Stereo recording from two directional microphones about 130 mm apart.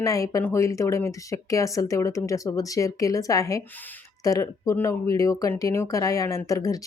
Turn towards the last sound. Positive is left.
turn(degrees=25)  # may be behind; listen again after turning